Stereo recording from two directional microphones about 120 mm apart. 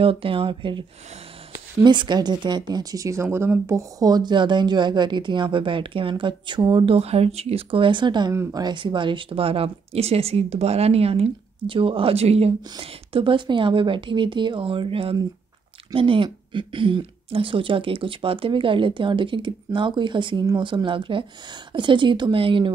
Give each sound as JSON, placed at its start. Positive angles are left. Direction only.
{"t": 0.0, "sound": "speech", "side_deg": -50}
{"t": 8.3, "sound": "speech", "side_deg": -25}
{"t": 12.7, "sound": "speech", "side_deg": -45}